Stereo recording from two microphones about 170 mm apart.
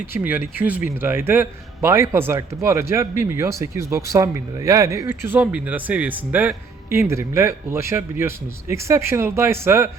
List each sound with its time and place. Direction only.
0.1 s speech: 10° right (ahead or behind)